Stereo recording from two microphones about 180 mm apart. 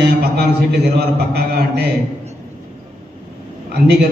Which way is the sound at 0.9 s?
60° right (ahead or behind).